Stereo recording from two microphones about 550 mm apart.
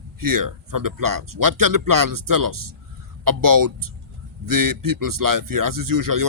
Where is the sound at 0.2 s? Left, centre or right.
Right.